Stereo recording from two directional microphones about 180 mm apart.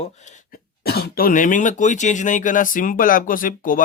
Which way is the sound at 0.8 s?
60° left (ahead or behind).